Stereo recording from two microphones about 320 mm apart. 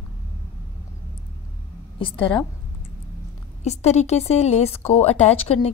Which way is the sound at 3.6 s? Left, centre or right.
Left.